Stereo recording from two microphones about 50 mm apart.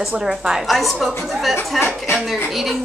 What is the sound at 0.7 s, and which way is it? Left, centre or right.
A woman's voice, centre.